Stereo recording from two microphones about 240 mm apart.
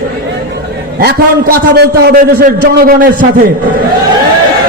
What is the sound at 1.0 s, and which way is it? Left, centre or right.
A man's voice, right.